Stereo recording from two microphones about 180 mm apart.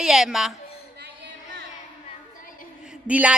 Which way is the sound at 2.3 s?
50° left (ahead or behind).